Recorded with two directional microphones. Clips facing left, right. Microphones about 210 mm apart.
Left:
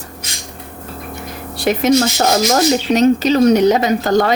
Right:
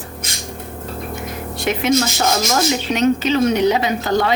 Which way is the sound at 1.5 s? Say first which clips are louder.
Left 4 dB; 35° left (ahead or behind).